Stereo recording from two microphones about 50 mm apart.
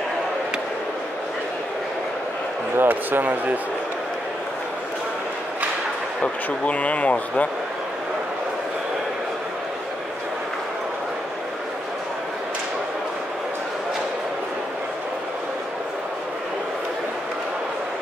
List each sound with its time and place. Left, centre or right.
2.8 s speech: right
6.2 s speech: left